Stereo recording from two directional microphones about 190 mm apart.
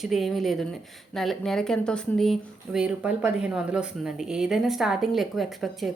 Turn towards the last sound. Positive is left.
turn(degrees=0)  # may be behind; listen again after turning